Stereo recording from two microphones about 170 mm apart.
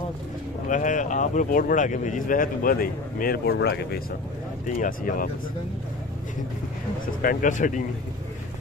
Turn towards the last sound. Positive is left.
turn(degrees=50)  # may be behind; listen again after turning